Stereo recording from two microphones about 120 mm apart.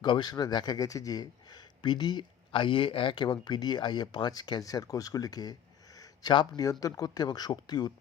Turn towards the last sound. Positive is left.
turn(degrees=35)  # may be behind; listen again after turning